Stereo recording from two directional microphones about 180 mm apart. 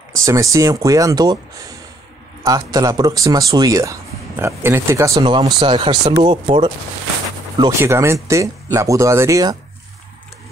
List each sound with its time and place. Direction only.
0.1 s a man's voice: 20° right (ahead or behind)
7.8 s speech: 15° right (ahead or behind)